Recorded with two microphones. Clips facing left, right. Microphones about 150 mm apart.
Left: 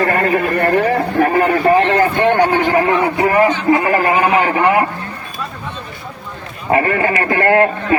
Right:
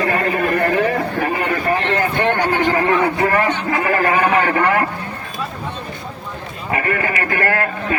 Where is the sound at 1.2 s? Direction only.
50° left (ahead or behind).